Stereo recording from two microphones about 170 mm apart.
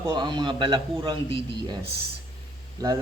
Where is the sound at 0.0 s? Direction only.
25° right (ahead or behind).